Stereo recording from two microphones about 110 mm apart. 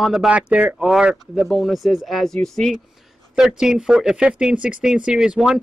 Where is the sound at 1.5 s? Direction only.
Centre (ahead or behind).